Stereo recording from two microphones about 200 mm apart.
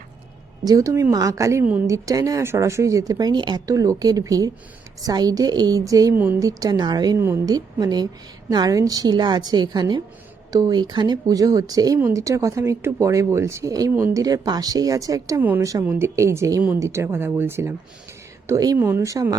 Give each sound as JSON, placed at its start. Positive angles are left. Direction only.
{"t": 0.6, "sound": "a woman's voice", "side_deg": -15}